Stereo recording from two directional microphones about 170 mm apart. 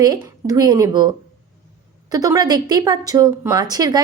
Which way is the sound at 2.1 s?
20° right (ahead or behind).